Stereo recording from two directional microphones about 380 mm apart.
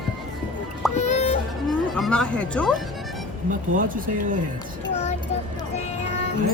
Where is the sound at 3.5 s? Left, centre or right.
Right.